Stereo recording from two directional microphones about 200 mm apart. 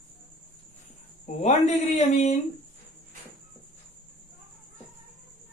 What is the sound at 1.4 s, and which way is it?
Speech, 35° left (ahead or behind).